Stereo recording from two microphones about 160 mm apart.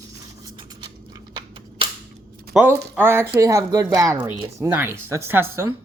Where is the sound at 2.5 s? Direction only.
10° right (ahead or behind).